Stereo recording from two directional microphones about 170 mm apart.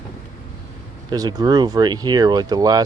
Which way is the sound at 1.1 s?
25° right (ahead or behind).